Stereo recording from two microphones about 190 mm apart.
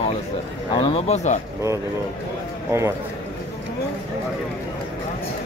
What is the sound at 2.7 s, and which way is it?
Speech, 15° right (ahead or behind).